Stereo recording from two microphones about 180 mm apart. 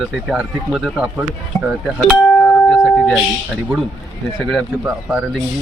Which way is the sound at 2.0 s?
5° left (ahead or behind).